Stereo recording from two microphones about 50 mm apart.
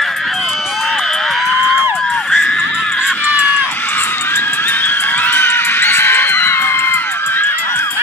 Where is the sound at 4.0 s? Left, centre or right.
Left.